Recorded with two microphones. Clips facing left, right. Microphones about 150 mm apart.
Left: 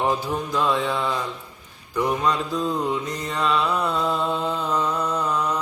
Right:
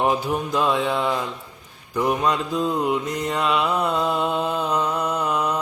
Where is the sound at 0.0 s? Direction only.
15° right (ahead or behind).